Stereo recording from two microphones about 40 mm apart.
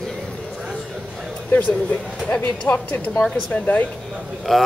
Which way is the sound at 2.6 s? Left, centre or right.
Left.